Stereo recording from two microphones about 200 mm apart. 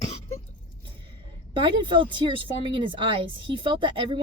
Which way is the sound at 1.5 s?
25° right (ahead or behind).